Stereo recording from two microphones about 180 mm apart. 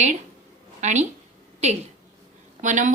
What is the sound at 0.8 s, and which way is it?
Speech, 40° right (ahead or behind).